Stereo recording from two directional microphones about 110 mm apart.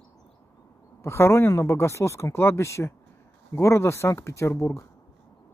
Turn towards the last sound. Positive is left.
turn(degrees=25)  # may be behind; listen again after turning